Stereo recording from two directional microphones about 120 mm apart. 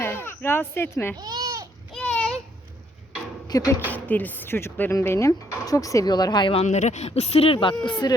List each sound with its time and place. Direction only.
0.0 s speech: 20° left (ahead or behind)
1.1 s goat: 35° right (ahead or behind)
2.0 s a sound: 10° left (ahead or behind)
3.5 s speech: 30° left (ahead or behind)
3.9 s speech: 15° left (ahead or behind); by 6.6 s 40° left (ahead or behind)
6.6 s speech: 75° left (ahead or behind); by 7.8 s 45° left (ahead or behind)
7.9 s speech: 35° left (ahead or behind)